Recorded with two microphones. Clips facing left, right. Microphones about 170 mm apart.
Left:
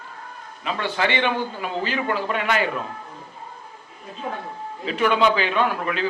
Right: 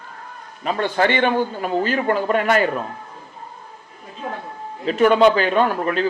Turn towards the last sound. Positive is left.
turn(degrees=-40)  # may be behind; listen again after turning